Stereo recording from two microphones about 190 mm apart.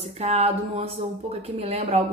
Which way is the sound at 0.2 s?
30° right (ahead or behind).